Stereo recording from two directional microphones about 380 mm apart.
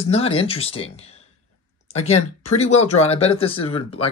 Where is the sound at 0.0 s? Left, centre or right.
Centre.